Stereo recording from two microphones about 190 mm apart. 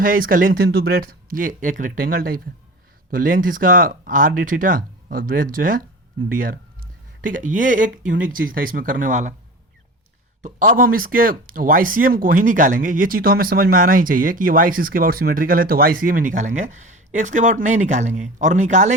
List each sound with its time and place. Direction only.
0.0 s speech: 45° right (ahead or behind)
10.4 s speech: 45° right (ahead or behind)